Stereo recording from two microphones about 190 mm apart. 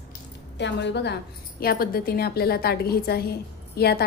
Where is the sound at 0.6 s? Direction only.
65° left (ahead or behind).